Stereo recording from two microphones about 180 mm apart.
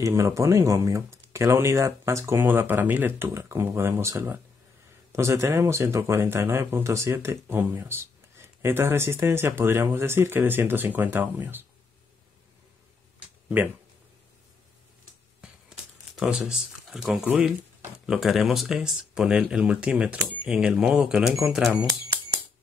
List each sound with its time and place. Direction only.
0.0 s speech: 15° right (ahead or behind)
16.2 s speech: 5° right (ahead or behind)